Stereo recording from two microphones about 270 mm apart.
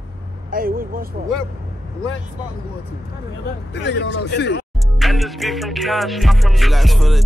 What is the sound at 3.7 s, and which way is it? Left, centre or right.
Speech, left.